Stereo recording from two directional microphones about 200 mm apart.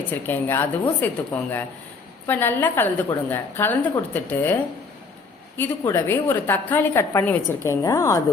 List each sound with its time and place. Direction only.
0.1 s a woman's voice: 10° left (ahead or behind)
5.5 s a woman's voice: 10° left (ahead or behind)